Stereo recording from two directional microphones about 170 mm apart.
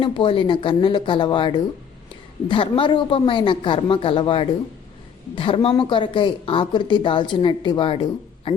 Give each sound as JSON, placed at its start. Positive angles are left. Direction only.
{"t": 0.0, "sound": "a man's voice", "side_deg": 30}